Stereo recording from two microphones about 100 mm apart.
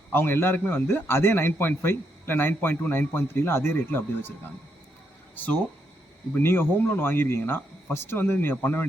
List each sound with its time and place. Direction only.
0.1 s a man's voice: 20° left (ahead or behind)